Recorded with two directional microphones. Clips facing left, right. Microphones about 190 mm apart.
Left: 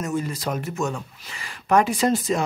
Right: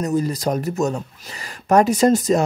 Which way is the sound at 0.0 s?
40° right (ahead or behind).